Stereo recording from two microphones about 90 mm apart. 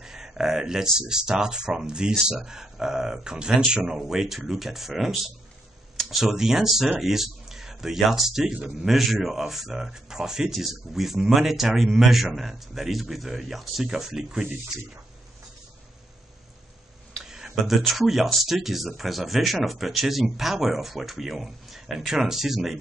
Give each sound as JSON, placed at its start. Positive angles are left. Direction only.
{"t": 0.0, "sound": "a sound", "side_deg": -5}
{"t": 0.9, "sound": "speech", "side_deg": -5}
{"t": 8.5, "sound": "speech", "side_deg": -15}
{"t": 8.8, "sound": "speech", "side_deg": 0}
{"t": 17.2, "sound": "speech", "side_deg": -5}